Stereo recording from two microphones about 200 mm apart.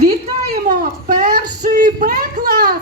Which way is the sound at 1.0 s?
45° right (ahead or behind).